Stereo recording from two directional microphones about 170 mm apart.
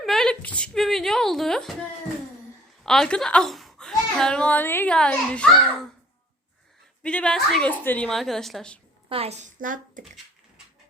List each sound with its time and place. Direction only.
0.0 s speech: centre (ahead or behind)
2.8 s a child's voice: 5° left (ahead or behind)
7.0 s a child's voice: 5° left (ahead or behind)
9.0 s a woman's voice: 35° right (ahead or behind); by 10.0 s 50° right (ahead or behind)